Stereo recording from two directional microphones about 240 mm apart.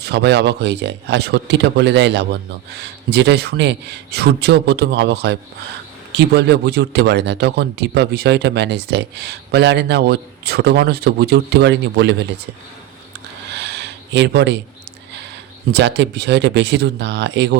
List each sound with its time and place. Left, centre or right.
0.0 s speech: right
13.5 s a sound: right
15.7 s speech: right